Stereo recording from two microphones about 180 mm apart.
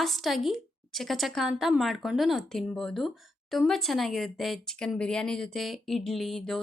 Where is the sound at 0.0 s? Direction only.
Centre (ahead or behind).